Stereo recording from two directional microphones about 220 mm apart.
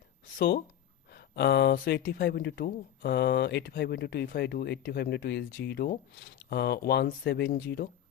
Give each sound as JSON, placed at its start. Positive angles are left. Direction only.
{"t": 0.3, "sound": "speech", "side_deg": 45}